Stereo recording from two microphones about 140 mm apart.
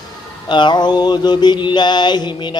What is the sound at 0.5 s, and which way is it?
Mantra, 30° left (ahead or behind).